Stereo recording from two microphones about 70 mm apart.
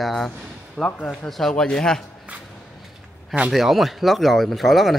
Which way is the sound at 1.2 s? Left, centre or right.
Centre.